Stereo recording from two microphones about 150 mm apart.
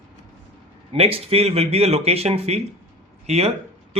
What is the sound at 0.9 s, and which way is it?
A man's voice, 40° right (ahead or behind).